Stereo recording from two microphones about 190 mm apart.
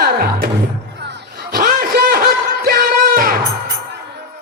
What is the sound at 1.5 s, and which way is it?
Music, 55° right (ahead or behind).